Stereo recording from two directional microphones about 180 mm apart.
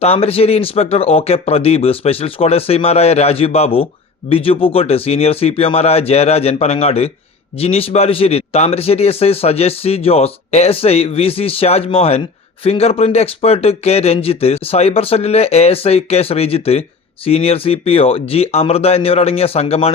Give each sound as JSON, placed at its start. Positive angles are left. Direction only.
{"t": 0.0, "sound": "speech", "side_deg": 35}